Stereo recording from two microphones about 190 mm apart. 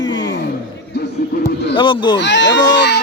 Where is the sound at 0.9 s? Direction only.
60° left (ahead or behind).